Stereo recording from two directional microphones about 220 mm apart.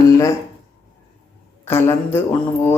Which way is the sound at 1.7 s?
10° left (ahead or behind).